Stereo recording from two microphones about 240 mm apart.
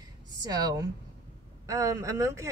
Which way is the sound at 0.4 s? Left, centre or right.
Centre.